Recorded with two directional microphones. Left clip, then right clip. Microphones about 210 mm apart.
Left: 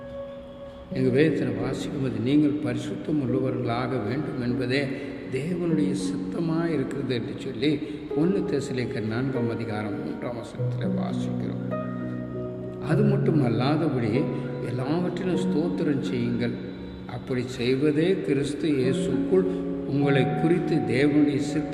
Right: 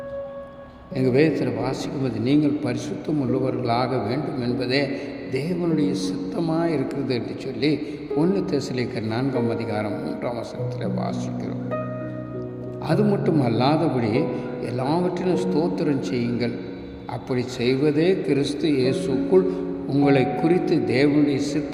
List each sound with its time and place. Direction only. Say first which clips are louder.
0.9 s a man's voice: right 3 dB; 25° right (ahead or behind)
12.9 s a man's voice: right 3 dB; 20° right (ahead or behind)